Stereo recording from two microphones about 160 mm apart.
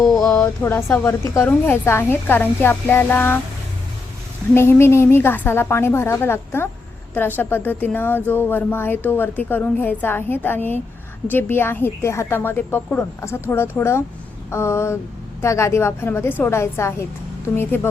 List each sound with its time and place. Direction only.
0.1 s speech: 5° left (ahead or behind)
4.5 s speech: 15° left (ahead or behind)